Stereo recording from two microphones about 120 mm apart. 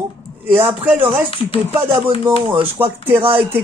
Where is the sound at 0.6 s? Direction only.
50° right (ahead or behind).